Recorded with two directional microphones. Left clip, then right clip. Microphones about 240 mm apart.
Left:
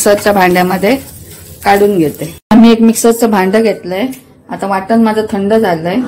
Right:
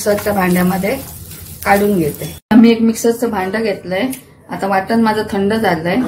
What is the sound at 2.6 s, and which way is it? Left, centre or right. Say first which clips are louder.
A woman's voice: left 7 dB; left.